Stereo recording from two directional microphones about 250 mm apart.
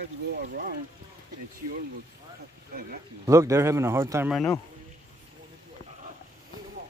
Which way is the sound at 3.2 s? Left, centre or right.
Centre.